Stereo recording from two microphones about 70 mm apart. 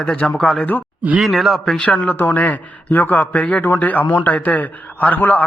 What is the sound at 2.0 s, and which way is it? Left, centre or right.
A man's voice, left.